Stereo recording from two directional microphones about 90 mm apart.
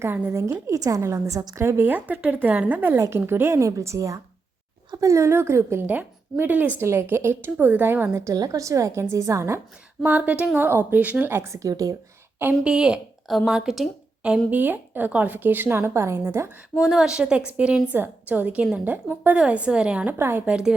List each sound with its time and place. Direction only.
0.0 s a woman's voice: 25° right (ahead or behind)
1.6 s a woman's voice: 25° right (ahead or behind)
8.1 s a woman's voice: 35° right (ahead or behind)
10.0 s speech: 15° right (ahead or behind); by 11.9 s 40° right (ahead or behind)
12.6 s speech: 10° right (ahead or behind)
14.5 s speech: 20° right (ahead or behind)
16.8 s a woman's voice: 5° right (ahead or behind); by 20.5 s 25° right (ahead or behind)
20.5 s a woman's voice: 5° right (ahead or behind)